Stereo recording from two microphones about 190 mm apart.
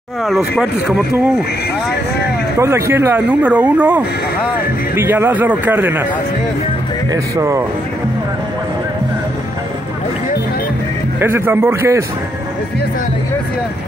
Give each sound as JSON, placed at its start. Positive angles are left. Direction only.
{"t": 0.2, "sound": "speech", "side_deg": 0}
{"t": 2.6, "sound": "speech", "side_deg": -15}
{"t": 7.1, "sound": "speech", "side_deg": -15}
{"t": 11.1, "sound": "speech", "side_deg": -10}